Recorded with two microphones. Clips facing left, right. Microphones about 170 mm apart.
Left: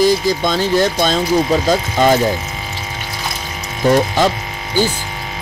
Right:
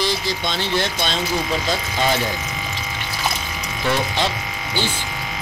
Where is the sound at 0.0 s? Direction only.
45° left (ahead or behind).